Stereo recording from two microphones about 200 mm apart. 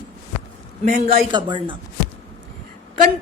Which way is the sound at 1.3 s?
25° right (ahead or behind).